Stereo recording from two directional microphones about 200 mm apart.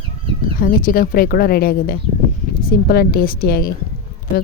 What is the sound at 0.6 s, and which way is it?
A woman's voice, 45° left (ahead or behind).